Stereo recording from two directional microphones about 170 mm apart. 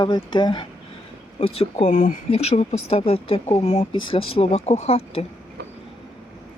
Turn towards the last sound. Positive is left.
turn(degrees=35)  # may be behind; listen again after turning